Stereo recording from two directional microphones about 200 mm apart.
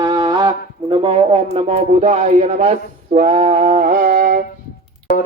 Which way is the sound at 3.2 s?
35° right (ahead or behind).